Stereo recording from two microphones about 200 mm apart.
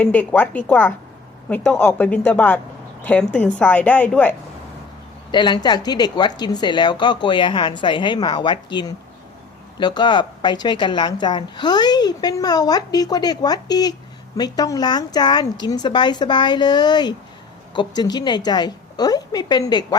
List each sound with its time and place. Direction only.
0.0 s a woman's voice: 5° left (ahead or behind)
5.3 s a woman's voice: 20° left (ahead or behind)